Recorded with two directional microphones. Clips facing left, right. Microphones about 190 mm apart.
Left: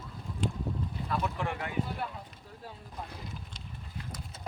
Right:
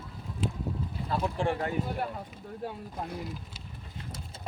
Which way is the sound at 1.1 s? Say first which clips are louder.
Right 5 dB; 30° right (ahead or behind).